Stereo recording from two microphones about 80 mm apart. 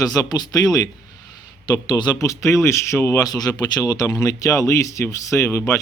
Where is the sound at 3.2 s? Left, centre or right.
Left.